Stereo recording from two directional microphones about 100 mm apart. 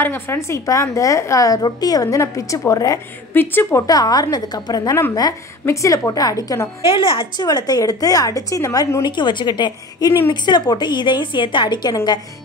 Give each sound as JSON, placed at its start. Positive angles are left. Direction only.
{"t": 0.0, "sound": "a woman's voice", "side_deg": 25}
{"t": 3.3, "sound": "a woman's voice", "side_deg": 20}
{"t": 3.8, "sound": "a woman's voice", "side_deg": 40}
{"t": 5.7, "sound": "a woman's voice", "side_deg": 30}
{"t": 6.9, "sound": "a woman's voice", "side_deg": 65}
{"t": 7.4, "sound": "a woman's voice", "side_deg": 45}
{"t": 9.0, "sound": "a woman's voice", "side_deg": 50}